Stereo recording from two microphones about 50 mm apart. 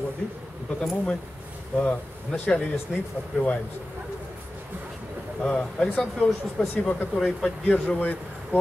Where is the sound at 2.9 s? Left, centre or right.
Centre.